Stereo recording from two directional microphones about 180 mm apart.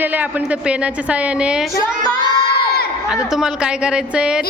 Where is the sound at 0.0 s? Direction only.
10° right (ahead or behind).